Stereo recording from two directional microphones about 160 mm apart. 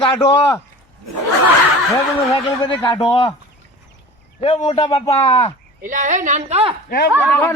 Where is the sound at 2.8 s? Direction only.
30° left (ahead or behind).